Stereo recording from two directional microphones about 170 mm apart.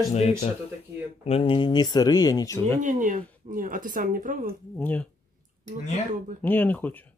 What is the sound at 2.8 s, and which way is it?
Speech, 50° right (ahead or behind).